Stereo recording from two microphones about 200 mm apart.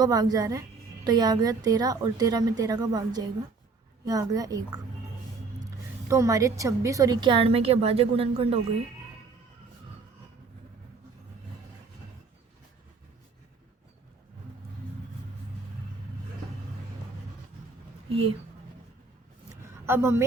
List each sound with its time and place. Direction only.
0.0 s a woman's voice: 20° right (ahead or behind)
6.1 s a woman's voice: 15° right (ahead or behind)
18.1 s speech: 30° right (ahead or behind)
19.6 s a sound: 15° right (ahead or behind)